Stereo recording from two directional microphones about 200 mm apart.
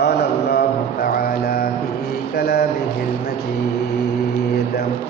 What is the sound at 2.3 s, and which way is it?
Speech, 50° left (ahead or behind).